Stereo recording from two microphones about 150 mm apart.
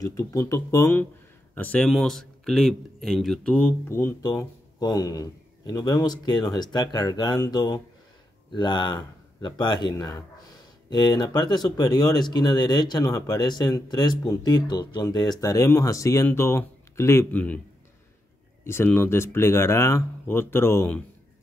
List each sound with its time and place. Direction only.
0.0 s speech: 20° left (ahead or behind)
18.6 s speech: 15° left (ahead or behind)